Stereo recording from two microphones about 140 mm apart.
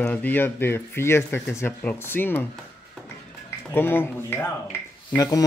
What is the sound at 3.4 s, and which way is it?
Speech, 15° left (ahead or behind).